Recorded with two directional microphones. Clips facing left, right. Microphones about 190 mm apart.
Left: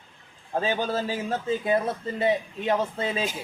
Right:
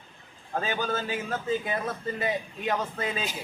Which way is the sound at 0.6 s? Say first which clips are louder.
Left 3 dB; 25° left (ahead or behind).